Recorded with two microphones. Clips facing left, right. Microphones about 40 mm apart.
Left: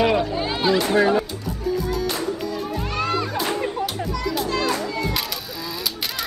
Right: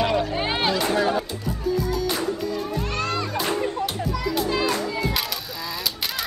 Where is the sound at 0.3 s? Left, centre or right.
Right.